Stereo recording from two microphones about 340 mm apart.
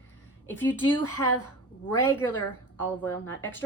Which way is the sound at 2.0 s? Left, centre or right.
Centre.